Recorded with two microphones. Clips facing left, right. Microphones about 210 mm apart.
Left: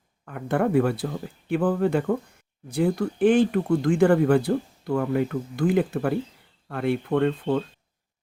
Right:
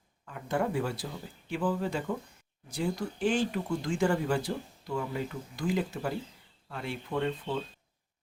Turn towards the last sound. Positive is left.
turn(degrees=60)  # may be behind; listen again after turning